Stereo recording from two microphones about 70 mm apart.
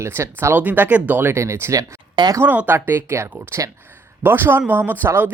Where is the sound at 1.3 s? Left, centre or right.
Right.